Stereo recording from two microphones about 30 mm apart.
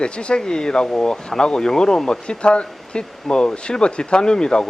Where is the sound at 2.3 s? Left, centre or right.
Left.